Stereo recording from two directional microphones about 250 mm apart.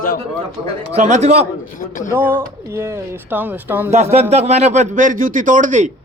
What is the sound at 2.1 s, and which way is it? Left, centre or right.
Speech, centre.